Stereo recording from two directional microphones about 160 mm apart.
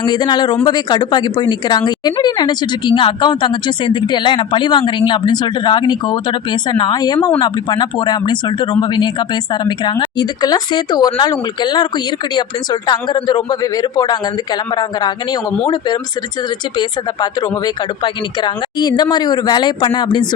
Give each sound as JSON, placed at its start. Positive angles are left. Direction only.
{"t": 0.0, "sound": "a woman's voice", "side_deg": 25}